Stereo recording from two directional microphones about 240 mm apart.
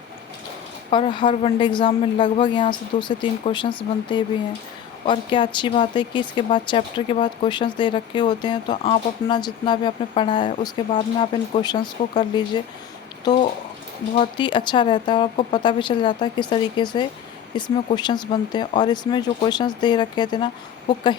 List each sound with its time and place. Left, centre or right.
0.9 s speech: left